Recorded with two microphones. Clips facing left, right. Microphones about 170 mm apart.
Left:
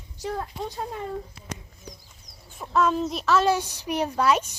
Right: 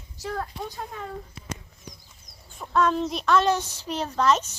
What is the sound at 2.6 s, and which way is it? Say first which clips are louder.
A woman's voice: even; 5° left (ahead or behind).